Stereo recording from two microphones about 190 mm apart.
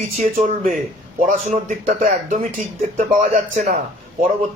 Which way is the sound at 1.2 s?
40° right (ahead or behind).